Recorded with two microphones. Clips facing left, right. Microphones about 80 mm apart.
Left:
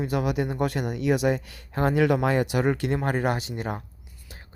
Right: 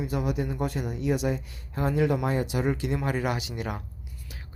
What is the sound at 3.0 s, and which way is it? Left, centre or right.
Speech, left.